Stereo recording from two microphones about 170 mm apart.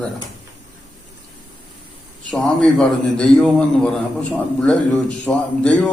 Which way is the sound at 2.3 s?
5° left (ahead or behind).